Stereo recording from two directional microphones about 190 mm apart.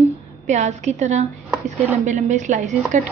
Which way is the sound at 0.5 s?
35° right (ahead or behind).